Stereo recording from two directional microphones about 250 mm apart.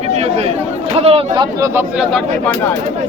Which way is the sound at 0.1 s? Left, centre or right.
Right.